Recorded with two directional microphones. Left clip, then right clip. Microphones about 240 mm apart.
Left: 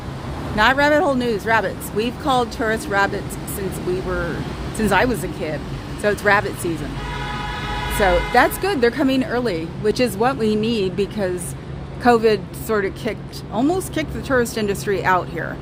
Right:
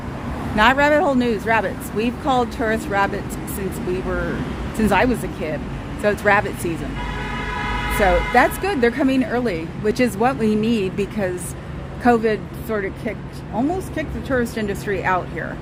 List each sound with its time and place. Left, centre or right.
0.5 s speech: centre
4.8 s speech: centre
8.0 s speech: centre